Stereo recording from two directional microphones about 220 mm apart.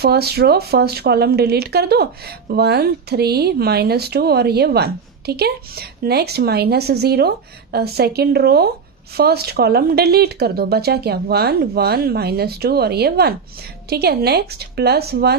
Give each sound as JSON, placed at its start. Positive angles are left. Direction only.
{"t": 0.0, "sound": "speech", "side_deg": -45}